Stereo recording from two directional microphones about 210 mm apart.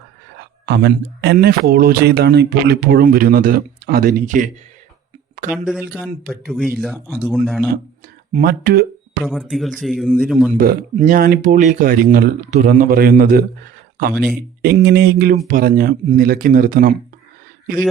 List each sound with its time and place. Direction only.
0.6 s speech: 55° right (ahead or behind)
5.5 s a man's voice: 5° right (ahead or behind)
8.3 s speech: 45° right (ahead or behind)
9.2 s a man's voice: centre (ahead or behind)
10.5 s speech: 45° right (ahead or behind)
14.6 s speech: 50° right (ahead or behind)